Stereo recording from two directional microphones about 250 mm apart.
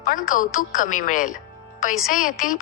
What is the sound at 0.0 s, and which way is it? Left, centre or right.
A woman's voice, left.